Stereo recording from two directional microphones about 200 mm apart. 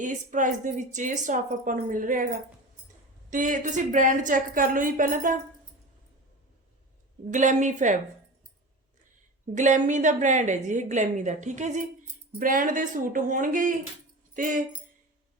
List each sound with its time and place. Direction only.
0.0 s a woman's voice: 40° right (ahead or behind)
7.3 s a woman's voice: 40° right (ahead or behind)
9.6 s a woman's voice: 35° right (ahead or behind)